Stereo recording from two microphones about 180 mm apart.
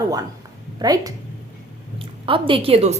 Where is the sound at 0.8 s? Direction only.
20° right (ahead or behind).